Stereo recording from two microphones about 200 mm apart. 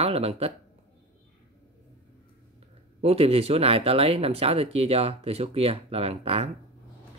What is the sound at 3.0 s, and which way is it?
Speech, 30° right (ahead or behind).